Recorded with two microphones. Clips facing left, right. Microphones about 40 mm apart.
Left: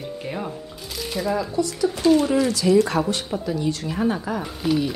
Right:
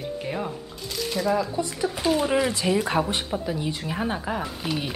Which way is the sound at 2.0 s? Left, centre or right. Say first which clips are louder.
Left 4 dB; centre.